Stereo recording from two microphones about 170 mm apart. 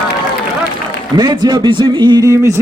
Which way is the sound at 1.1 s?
25° right (ahead or behind).